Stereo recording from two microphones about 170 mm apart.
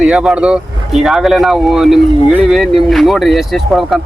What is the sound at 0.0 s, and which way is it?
Speech, 5° right (ahead or behind).